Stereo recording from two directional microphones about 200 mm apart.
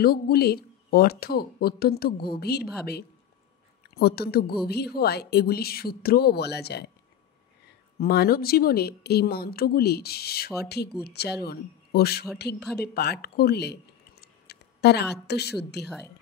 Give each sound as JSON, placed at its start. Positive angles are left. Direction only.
{"t": 0.0, "sound": "speech", "side_deg": 50}
{"t": 3.9, "sound": "speech", "side_deg": 50}
{"t": 8.0, "sound": "speech", "side_deg": 50}
{"t": 12.5, "sound": "speech", "side_deg": 0}
{"t": 12.8, "sound": "speech", "side_deg": 55}
{"t": 14.2, "sound": "a sound", "side_deg": 55}
{"t": 15.8, "sound": "speech", "side_deg": 55}